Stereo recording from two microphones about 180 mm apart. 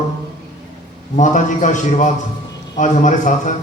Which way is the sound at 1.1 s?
45° left (ahead or behind).